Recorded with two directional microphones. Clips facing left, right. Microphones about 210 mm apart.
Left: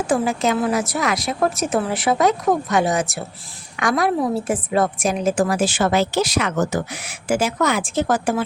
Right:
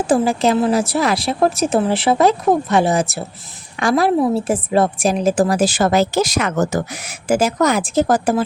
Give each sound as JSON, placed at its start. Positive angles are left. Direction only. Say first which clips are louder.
{"t": 0.1, "sound": "a woman's voice", "louder": "right 4 dB", "side_deg": -35}